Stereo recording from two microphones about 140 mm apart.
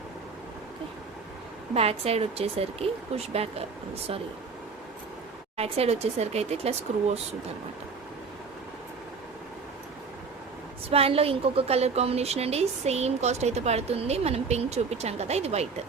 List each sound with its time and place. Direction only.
1.7 s a woman's voice: 45° right (ahead or behind)
5.5 s a woman's voice: 45° right (ahead or behind)
10.8 s a woman's voice: 45° right (ahead or behind)